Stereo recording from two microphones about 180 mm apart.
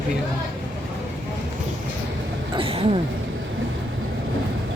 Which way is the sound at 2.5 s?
30° right (ahead or behind).